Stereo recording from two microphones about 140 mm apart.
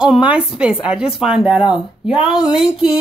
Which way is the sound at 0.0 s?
5° right (ahead or behind).